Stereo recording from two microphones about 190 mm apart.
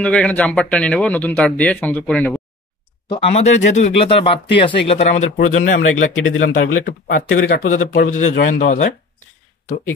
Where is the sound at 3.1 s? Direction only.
30° left (ahead or behind).